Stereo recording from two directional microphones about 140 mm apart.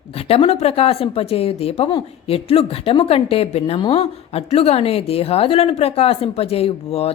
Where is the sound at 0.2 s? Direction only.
45° left (ahead or behind).